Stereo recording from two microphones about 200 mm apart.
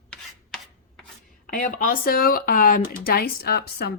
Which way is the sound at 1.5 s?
40° left (ahead or behind).